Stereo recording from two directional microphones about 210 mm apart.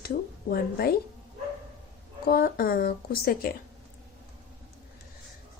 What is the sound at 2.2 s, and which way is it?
A woman's voice, 45° left (ahead or behind).